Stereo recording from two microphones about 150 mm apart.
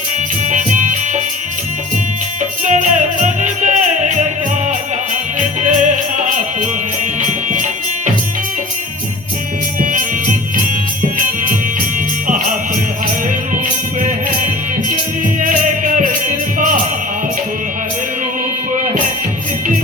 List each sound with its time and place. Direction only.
0.4 s music: 55° right (ahead or behind)
2.4 s music: 55° right (ahead or behind)
5.4 s music: 55° right (ahead or behind)
9.8 s music: 60° right (ahead or behind)
14.0 s music: 60° right (ahead or behind)
18.7 s music: 60° right (ahead or behind)